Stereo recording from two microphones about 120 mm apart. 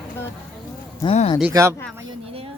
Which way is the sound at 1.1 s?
55° left (ahead or behind).